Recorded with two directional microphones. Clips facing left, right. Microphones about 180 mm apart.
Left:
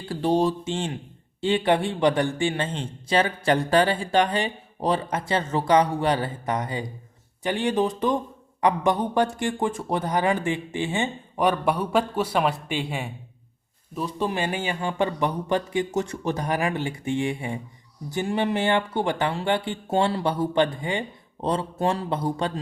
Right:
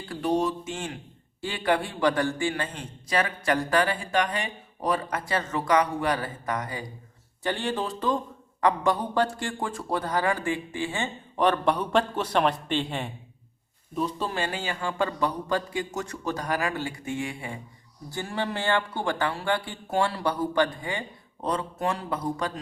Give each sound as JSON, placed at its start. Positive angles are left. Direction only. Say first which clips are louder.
{"t": 0.1, "sound": "a man's voice", "louder": "left 4 dB", "side_deg": 30}